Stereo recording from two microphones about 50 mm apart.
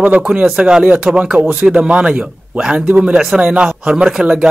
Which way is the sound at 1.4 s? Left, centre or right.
Right.